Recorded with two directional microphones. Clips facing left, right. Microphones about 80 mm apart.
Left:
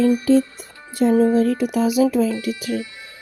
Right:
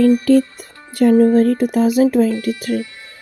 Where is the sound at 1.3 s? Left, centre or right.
Right.